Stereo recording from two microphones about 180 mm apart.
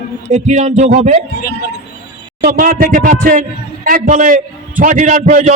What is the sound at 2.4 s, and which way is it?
A man's voice, 55° right (ahead or behind).